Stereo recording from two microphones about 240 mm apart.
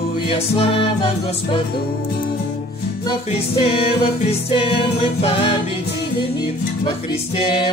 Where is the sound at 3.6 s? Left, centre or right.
Left.